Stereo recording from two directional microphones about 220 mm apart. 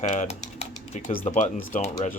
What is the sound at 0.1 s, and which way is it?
Speech, 30° left (ahead or behind).